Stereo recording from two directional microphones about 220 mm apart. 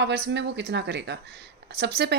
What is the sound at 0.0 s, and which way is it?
Speech, 50° right (ahead or behind).